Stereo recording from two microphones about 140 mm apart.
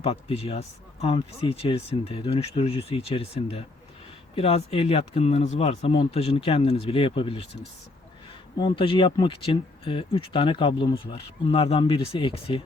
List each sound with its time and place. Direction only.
0.0 s speech: 45° left (ahead or behind)
8.5 s speech: 35° left (ahead or behind)